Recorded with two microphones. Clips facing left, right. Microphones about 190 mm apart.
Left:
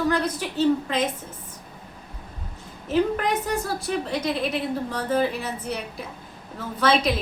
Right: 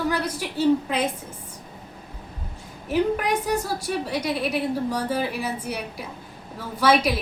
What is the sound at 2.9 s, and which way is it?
A woman's voice, 10° right (ahead or behind).